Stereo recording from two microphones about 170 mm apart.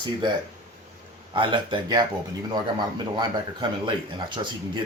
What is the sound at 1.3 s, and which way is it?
Speech, 30° right (ahead or behind).